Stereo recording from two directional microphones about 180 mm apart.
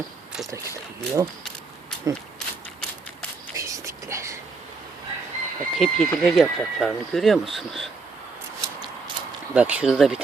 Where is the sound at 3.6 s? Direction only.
15° right (ahead or behind).